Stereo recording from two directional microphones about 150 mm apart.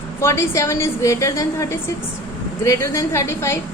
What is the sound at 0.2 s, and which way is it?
A woman's voice, 20° left (ahead or behind).